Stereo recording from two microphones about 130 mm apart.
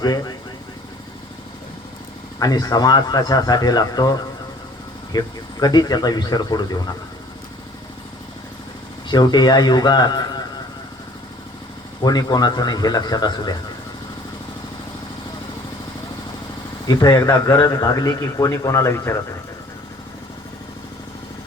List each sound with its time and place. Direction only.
0.0 s a man's voice: 30° left (ahead or behind)
2.4 s speech: 30° left (ahead or behind)
9.0 s speech: 30° left (ahead or behind)
12.0 s speech: 30° left (ahead or behind)
16.8 s a man's voice: 30° left (ahead or behind)